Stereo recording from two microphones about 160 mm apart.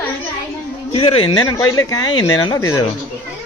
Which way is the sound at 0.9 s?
35° left (ahead or behind).